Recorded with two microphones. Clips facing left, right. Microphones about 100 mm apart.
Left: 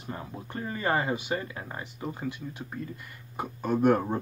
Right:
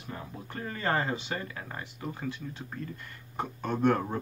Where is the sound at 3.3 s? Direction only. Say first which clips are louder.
Left 3 dB; 5° left (ahead or behind).